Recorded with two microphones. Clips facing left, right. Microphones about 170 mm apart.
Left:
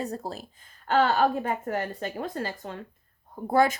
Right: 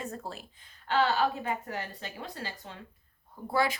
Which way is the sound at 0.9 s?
50° left (ahead or behind).